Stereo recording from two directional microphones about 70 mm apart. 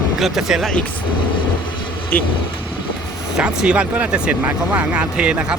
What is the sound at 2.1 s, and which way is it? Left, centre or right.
Speech, left.